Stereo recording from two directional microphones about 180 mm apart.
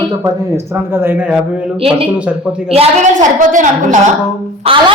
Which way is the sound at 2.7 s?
35° right (ahead or behind).